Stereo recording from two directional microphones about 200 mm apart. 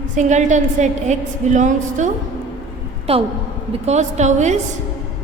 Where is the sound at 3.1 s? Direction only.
30° right (ahead or behind).